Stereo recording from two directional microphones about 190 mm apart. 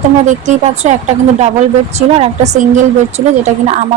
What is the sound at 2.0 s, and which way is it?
A woman's voice, 35° right (ahead or behind).